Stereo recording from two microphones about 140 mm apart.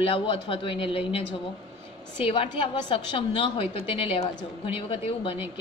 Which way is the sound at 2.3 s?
40° left (ahead or behind).